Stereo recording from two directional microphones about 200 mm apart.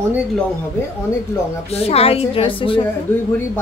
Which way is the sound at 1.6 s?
30° left (ahead or behind).